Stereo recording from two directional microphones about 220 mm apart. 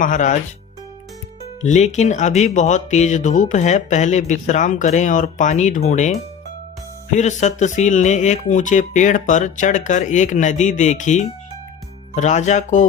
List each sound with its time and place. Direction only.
0.0 s speech: 35° left (ahead or behind)
1.6 s speech: 30° left (ahead or behind)